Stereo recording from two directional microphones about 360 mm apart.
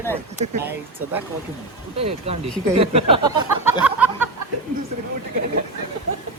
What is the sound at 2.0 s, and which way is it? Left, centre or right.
Speech, centre.